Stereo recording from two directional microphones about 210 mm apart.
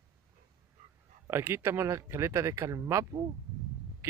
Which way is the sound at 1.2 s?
10° right (ahead or behind).